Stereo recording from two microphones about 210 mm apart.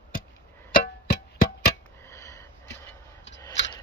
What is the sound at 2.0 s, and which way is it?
Sniff, 15° left (ahead or behind).